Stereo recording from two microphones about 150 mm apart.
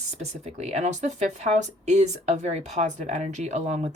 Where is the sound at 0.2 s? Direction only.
45° right (ahead or behind).